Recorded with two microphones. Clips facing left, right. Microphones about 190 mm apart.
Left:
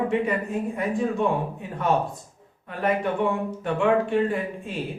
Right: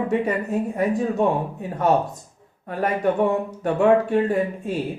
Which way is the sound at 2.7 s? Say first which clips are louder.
Right 3 dB; 40° right (ahead or behind).